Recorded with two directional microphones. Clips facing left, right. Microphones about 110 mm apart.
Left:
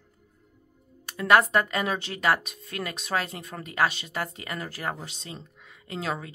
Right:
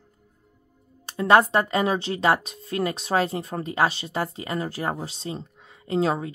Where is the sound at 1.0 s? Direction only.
25° right (ahead or behind).